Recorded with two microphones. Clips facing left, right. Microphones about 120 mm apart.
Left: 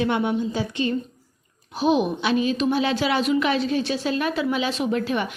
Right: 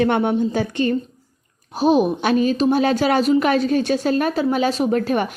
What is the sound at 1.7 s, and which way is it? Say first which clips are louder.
A woman's voice: right 4 dB; 40° right (ahead or behind).